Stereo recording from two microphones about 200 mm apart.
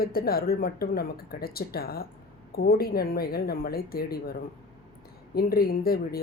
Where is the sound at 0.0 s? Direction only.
50° left (ahead or behind).